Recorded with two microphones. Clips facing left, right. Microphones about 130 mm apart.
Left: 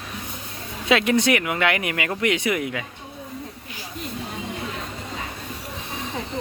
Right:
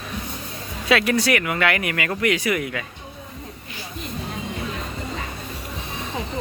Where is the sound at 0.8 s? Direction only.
20° left (ahead or behind).